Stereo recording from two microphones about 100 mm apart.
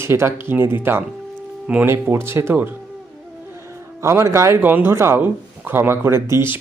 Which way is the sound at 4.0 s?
30° right (ahead or behind).